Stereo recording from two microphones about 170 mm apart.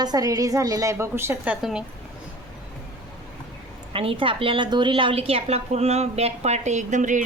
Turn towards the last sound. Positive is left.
turn(degrees=-45)  # may be behind; listen again after turning